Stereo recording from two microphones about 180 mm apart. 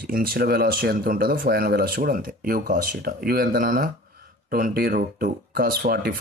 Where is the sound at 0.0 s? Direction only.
55° right (ahead or behind).